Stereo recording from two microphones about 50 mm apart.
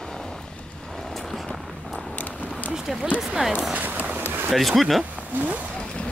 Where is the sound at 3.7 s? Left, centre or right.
Right.